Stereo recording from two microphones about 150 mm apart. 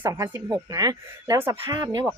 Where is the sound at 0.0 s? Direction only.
20° right (ahead or behind).